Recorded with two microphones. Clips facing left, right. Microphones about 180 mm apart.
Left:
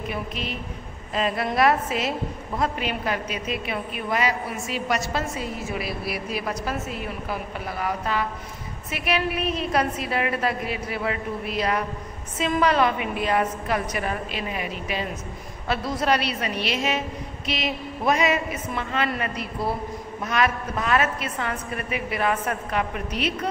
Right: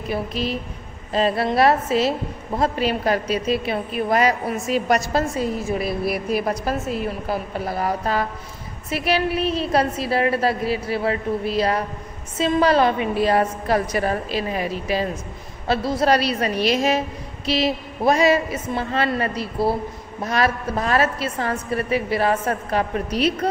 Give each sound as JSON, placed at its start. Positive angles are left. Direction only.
{"t": 0.1, "sound": "a woman's voice", "side_deg": -35}